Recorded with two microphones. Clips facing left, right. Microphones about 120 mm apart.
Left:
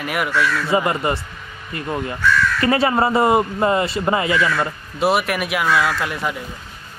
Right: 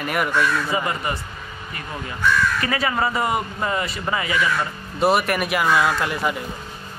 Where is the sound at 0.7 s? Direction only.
25° left (ahead or behind).